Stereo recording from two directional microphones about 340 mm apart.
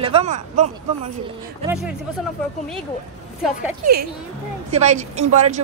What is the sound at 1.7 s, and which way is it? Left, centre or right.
Speech, centre.